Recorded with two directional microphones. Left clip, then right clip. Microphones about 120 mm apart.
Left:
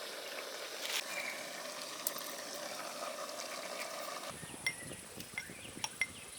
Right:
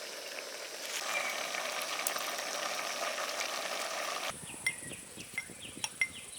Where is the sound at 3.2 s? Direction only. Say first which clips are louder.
Right 7 dB; 15° right (ahead or behind).